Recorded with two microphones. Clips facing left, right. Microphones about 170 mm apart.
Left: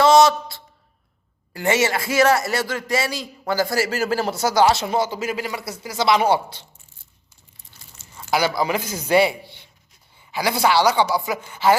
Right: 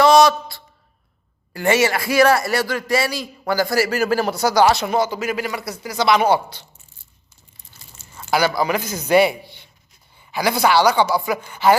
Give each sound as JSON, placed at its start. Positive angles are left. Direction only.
{"t": 0.0, "sound": "a sound", "side_deg": 25}
{"t": 1.5, "sound": "a man's voice", "side_deg": 20}
{"t": 8.3, "sound": "a man's voice", "side_deg": 25}